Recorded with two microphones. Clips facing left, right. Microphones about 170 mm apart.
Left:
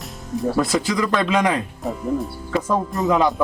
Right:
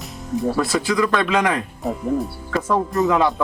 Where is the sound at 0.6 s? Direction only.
15° left (ahead or behind).